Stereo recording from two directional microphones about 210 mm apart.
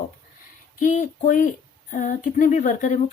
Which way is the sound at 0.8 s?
35° left (ahead or behind).